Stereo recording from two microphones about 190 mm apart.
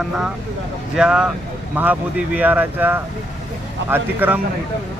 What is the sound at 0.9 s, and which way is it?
Speech, 5° right (ahead or behind).